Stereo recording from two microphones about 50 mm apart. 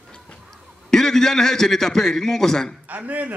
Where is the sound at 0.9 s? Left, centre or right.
Centre.